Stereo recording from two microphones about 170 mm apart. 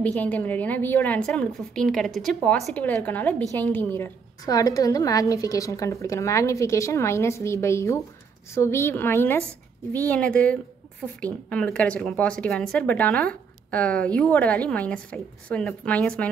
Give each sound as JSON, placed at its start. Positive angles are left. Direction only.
{"t": 0.0, "sound": "a woman's voice", "side_deg": 10}